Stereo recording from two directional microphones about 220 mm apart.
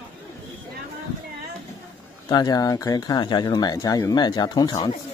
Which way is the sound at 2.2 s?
20° left (ahead or behind).